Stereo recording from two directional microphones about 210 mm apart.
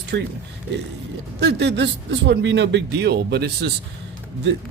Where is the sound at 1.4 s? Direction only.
55° right (ahead or behind).